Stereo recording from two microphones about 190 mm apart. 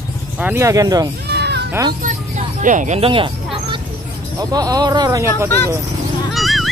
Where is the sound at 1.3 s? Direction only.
60° right (ahead or behind).